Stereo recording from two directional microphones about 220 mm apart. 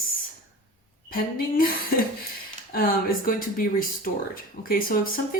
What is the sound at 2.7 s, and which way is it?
Speech, 40° left (ahead or behind).